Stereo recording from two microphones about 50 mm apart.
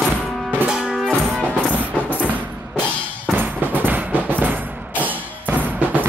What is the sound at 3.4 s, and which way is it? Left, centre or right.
Music, right.